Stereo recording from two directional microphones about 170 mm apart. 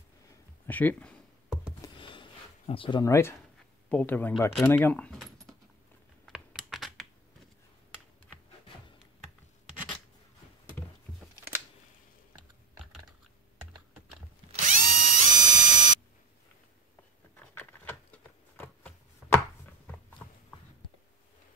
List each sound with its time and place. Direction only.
0.7 s speech: 10° left (ahead or behind)
2.0 s a sound: 30° left (ahead or behind)
3.0 s speech: 15° left (ahead or behind)
4.6 s keys jangling: 10° left (ahead or behind)
6.2 s computer keyboard: 5° right (ahead or behind)
14.5 s drill: 50° right (ahead or behind)
17.6 s chopping: 10° left (ahead or behind)